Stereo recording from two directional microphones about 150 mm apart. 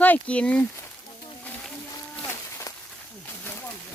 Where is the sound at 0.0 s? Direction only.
10° left (ahead or behind).